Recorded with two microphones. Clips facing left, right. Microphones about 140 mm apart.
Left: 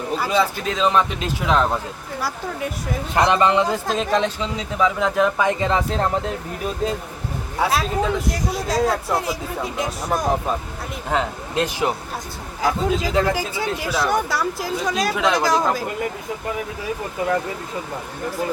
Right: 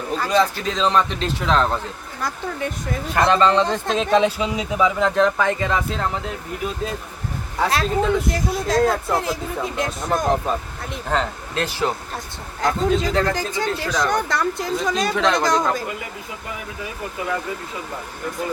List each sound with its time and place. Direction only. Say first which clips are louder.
0.2 s speech: right 3 dB; 5° left (ahead or behind)
3.2 s speech: even; 20° left (ahead or behind)
5.5 s speech: left 2 dB; 30° left (ahead or behind)
7.6 s speech: right 1 dB; centre (ahead or behind)
12.6 s speech: right 1 dB; 5° left (ahead or behind)